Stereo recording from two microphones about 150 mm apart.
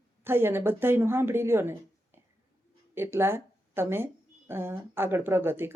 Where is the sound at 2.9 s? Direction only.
15° right (ahead or behind).